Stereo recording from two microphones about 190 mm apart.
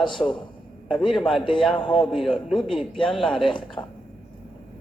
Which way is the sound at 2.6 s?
25° left (ahead or behind).